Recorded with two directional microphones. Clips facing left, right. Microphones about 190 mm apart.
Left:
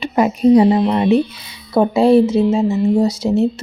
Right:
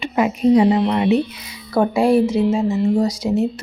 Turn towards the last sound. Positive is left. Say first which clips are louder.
# left 3 dB
turn(degrees=25)  # may be behind; listen again after turning